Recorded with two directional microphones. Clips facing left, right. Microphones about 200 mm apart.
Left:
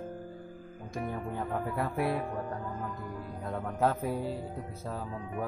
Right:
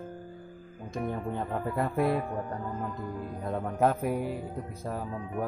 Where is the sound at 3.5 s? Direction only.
20° right (ahead or behind).